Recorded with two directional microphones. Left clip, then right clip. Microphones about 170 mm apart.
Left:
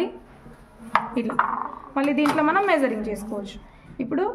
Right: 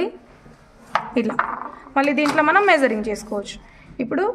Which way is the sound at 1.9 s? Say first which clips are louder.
Right 4 dB; 45° right (ahead or behind).